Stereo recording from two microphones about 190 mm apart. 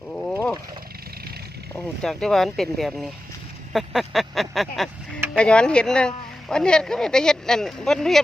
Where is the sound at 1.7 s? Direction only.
5° left (ahead or behind).